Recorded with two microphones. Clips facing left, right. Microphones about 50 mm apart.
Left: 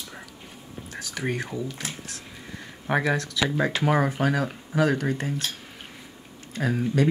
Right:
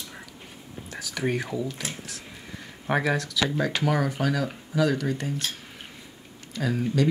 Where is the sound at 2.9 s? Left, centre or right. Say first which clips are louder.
Left 1 dB; centre.